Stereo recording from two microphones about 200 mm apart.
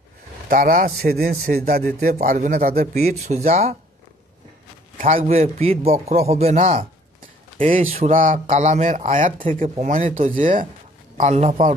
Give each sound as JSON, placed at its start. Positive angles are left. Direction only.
{"t": 0.5, "sound": "a man's voice", "side_deg": -45}
{"t": 4.9, "sound": "speech", "side_deg": -40}